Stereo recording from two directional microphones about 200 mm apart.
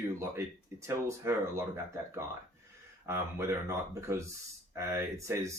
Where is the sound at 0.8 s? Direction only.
15° right (ahead or behind).